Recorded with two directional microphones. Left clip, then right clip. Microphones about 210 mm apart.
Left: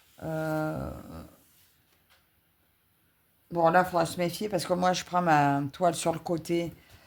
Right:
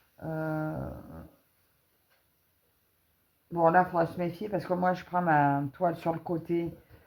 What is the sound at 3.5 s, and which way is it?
Speech, 40° left (ahead or behind).